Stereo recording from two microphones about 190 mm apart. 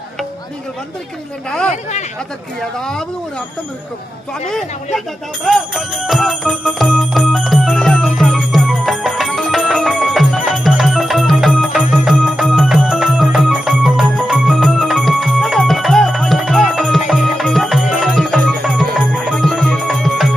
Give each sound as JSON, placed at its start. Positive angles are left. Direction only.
{"t": 1.5, "sound": "speech", "side_deg": 5}
{"t": 1.7, "sound": "speech", "side_deg": 40}
{"t": 2.6, "sound": "speech", "side_deg": 5}
{"t": 5.5, "sound": "jingle bell", "side_deg": 0}
{"t": 18.6, "sound": "music", "side_deg": -5}